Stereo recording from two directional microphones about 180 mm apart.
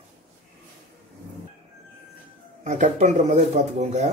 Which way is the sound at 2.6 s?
40° right (ahead or behind).